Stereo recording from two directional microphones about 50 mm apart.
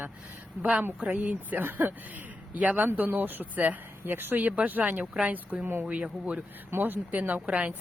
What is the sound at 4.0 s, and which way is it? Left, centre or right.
Speech, right.